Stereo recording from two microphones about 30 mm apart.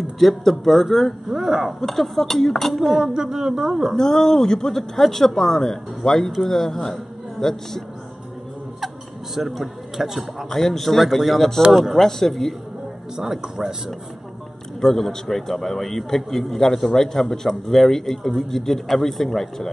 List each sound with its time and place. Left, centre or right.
0.2 s speech: centre
1.3 s speech: centre
2.7 s speech: centre
3.0 s speech: centre
3.9 s speech: centre
8.8 s a sound: centre
10.5 s speech: centre
12.0 s speech: centre
13.2 s speech: centre
14.8 s speech: centre